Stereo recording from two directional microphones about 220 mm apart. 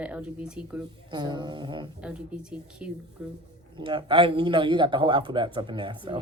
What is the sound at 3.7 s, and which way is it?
A man's voice, 20° right (ahead or behind).